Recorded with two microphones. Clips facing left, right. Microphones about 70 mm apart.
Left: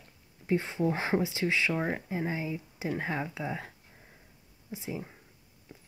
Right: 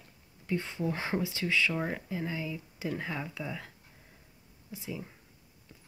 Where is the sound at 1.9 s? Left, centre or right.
Left.